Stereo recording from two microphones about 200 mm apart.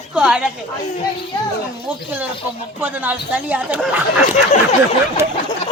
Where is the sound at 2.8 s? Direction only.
10° right (ahead or behind).